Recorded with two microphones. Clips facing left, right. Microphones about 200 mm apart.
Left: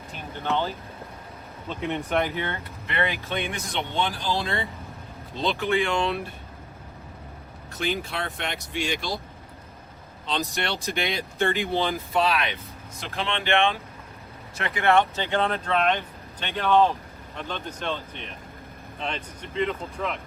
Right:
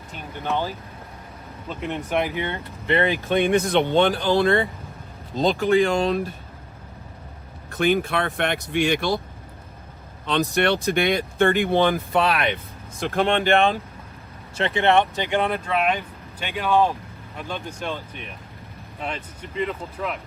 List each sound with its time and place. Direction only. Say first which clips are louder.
0.4 s speech: right 1 dB; 15° right (ahead or behind)
1.8 s speech: right 1 dB; centre (ahead or behind)
2.3 s speech: right 3 dB; 15° right (ahead or behind)
2.8 s speech: right 7 dB; 30° right (ahead or behind)
3.2 s speech: right 11 dB; 50° right (ahead or behind)
5.3 s speech: right 6 dB; 45° right (ahead or behind)
7.7 s speech: right 8 dB; 55° right (ahead or behind)
10.5 s speech: right 9 dB; 55° right (ahead or behind); by 13.7 s 40° right (ahead or behind)
14.6 s speech: right 3 dB; 25° right (ahead or behind); by 20.1 s 5° right (ahead or behind)